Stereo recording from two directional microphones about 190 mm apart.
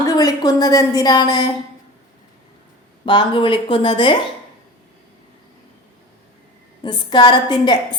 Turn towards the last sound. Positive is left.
turn(degrees=20)  # may be behind; listen again after turning